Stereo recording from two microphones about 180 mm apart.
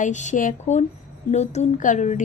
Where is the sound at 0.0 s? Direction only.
40° left (ahead or behind).